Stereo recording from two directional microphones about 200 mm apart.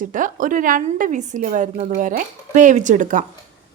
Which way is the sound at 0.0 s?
40° right (ahead or behind).